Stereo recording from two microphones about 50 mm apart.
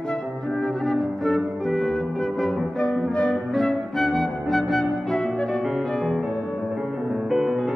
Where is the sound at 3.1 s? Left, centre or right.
Centre.